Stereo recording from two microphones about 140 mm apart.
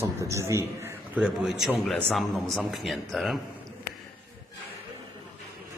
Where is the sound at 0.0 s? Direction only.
20° right (ahead or behind).